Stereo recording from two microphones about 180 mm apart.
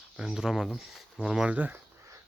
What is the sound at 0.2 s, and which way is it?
Speech, 5° right (ahead or behind).